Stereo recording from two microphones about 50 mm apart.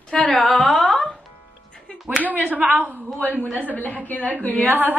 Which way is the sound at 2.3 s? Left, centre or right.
Right.